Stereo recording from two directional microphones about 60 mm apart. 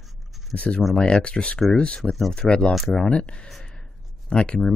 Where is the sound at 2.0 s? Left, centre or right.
Centre.